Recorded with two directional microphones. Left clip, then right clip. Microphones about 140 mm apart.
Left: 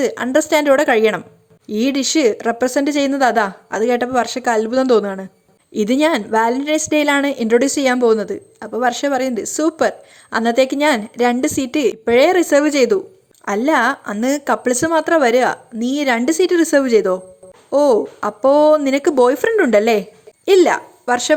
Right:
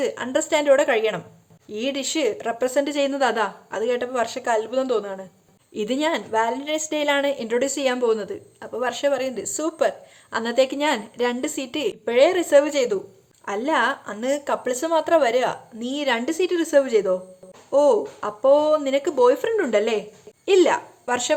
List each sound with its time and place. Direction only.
0.0 s a woman's voice: 45° left (ahead or behind)